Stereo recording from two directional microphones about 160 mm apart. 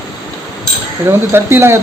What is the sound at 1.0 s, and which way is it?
Speech, 15° right (ahead or behind).